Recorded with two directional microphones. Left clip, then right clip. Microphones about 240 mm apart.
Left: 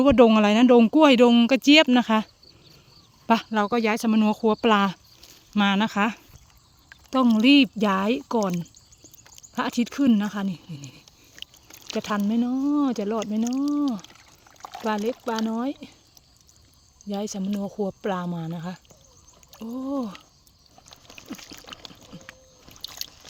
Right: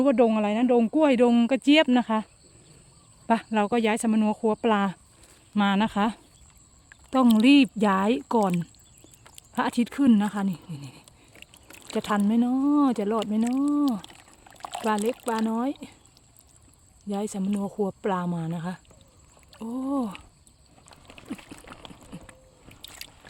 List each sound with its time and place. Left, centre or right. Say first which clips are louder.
0.0 s speech: left 5 dB; centre
14.6 s boiling: right 3 dB; right
14.8 s speech: even; centre
17.0 s speech: even; centre
20.9 s a sound: even; centre